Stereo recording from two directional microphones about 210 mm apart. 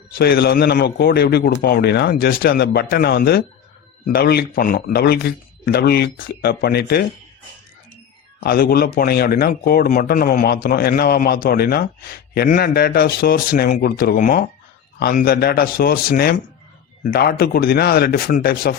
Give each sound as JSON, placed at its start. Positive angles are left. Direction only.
{"t": 0.2, "sound": "a man's voice", "side_deg": 50}
{"t": 8.4, "sound": "a man's voice", "side_deg": 45}